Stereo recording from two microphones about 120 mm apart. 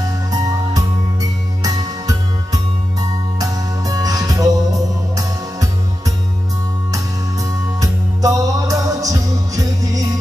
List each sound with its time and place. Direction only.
1.6 s music: 30° right (ahead or behind)